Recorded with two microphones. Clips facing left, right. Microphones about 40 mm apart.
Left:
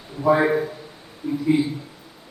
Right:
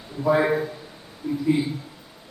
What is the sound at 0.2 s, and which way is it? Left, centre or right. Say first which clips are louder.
A man's voice: left 2 dB; centre.